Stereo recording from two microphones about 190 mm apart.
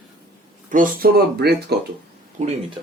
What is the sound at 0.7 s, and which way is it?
Speech, 50° right (ahead or behind).